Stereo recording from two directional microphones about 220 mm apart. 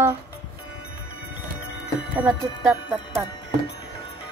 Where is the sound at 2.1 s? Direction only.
5° right (ahead or behind).